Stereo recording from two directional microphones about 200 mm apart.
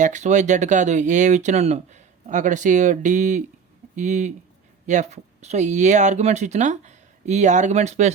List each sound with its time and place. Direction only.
0.0 s speech: 35° right (ahead or behind)